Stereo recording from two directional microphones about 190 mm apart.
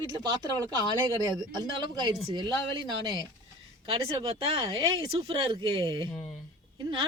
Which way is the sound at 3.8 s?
30° right (ahead or behind).